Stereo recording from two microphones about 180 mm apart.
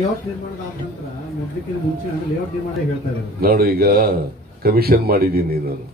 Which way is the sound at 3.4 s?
60° right (ahead or behind).